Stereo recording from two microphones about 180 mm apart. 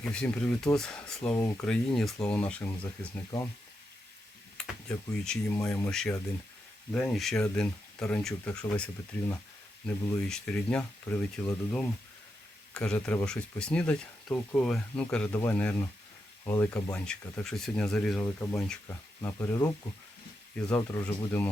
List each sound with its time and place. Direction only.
0.0 s speech: 5° left (ahead or behind)
1.6 s speech: 5° left (ahead or behind)
4.5 s speech: 5° left (ahead or behind)
16.9 s speech: 5° left (ahead or behind)
19.2 s speech: 15° left (ahead or behind)